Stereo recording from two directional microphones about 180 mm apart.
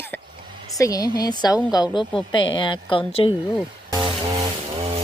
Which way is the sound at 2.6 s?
25° left (ahead or behind).